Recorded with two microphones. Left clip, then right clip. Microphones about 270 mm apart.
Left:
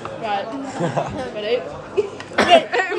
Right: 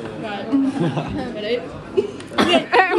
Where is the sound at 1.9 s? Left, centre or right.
Left.